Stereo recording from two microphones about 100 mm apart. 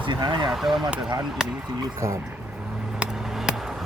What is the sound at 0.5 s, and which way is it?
Speech, 5° right (ahead or behind).